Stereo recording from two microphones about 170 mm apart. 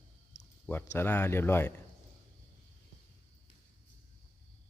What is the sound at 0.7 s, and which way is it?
A man's voice, 15° left (ahead or behind).